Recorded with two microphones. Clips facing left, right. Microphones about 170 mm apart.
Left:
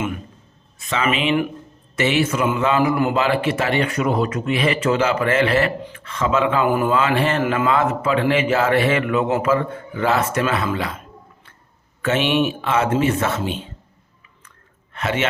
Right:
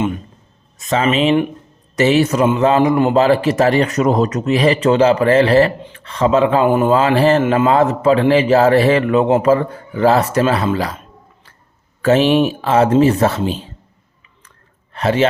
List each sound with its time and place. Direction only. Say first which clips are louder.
0.8 s a man's voice: right 6 dB; 40° right (ahead or behind)
12.0 s a man's voice: right 6 dB; 35° right (ahead or behind)
14.9 s a man's voice: right 7 dB; 35° right (ahead or behind)